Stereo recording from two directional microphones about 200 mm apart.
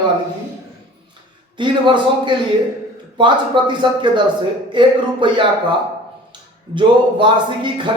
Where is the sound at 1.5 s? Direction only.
25° right (ahead or behind).